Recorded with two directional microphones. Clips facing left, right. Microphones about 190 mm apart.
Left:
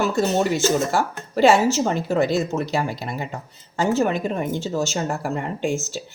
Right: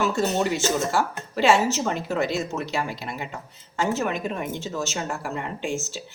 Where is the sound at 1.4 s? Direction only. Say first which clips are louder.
Left 4 dB; 35° left (ahead or behind).